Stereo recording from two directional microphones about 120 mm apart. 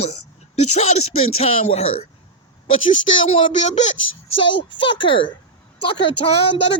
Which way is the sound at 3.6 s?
75° left (ahead or behind).